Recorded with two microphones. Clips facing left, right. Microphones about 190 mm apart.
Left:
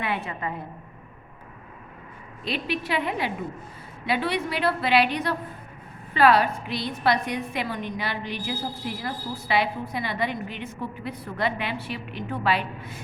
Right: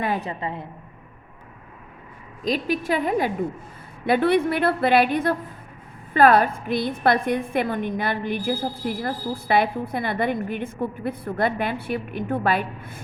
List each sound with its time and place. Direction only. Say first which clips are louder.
0.0 s a woman's voice: right 4 dB; 40° right (ahead or behind)
0.3 s a woman's voice: right 2 dB; 25° right (ahead or behind)
2.4 s a woman's voice: right 5 dB; 40° right (ahead or behind)